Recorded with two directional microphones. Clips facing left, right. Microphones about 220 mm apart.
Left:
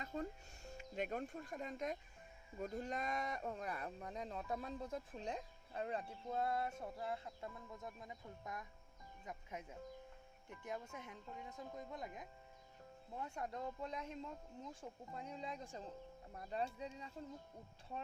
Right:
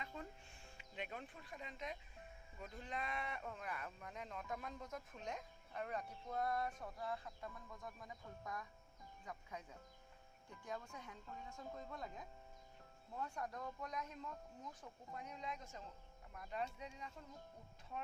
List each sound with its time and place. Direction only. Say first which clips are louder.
0.0 s speech: left 7 dB; 40° left (ahead or behind)